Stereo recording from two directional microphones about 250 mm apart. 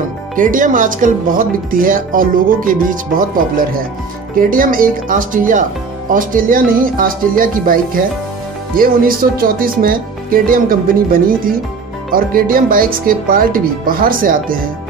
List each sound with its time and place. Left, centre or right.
0.4 s speech: right